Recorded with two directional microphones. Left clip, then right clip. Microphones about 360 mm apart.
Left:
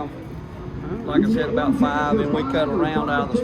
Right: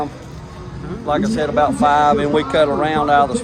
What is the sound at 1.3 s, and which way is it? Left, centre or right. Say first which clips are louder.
Speech: right 5 dB; centre.